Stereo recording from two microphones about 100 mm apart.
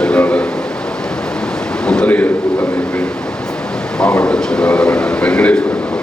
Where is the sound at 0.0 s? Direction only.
10° left (ahead or behind).